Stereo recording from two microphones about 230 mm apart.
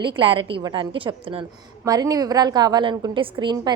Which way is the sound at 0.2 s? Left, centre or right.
Right.